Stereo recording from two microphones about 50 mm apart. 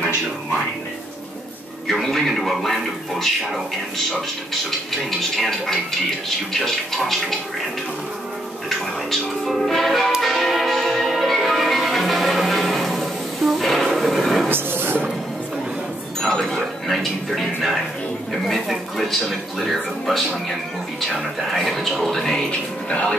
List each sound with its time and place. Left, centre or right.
1.9 s speech: centre
5.3 s speech: centre
8.6 s speech: centre
10.2 s change ringing: centre
14.5 s a sound: right
16.2 s speech: centre; by 23.1 s left